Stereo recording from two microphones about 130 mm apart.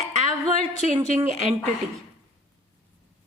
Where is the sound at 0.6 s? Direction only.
60° right (ahead or behind).